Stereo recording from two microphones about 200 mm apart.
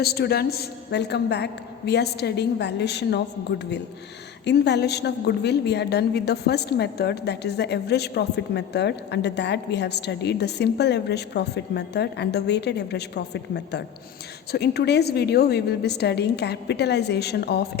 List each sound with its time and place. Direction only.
0.0 s a woman's voice: 50° left (ahead or behind)
4.4 s a woman's voice: 60° left (ahead or behind)